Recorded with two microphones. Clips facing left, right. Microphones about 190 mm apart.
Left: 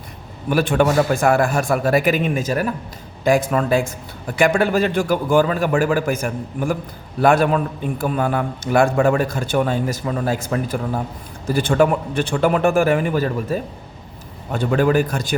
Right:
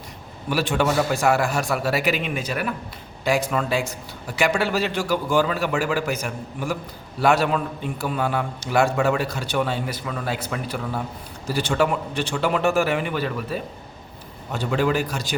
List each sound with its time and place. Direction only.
0.5 s a man's voice: 55° left (ahead or behind)